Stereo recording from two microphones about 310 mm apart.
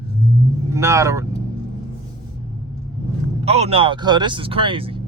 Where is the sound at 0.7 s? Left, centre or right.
Centre.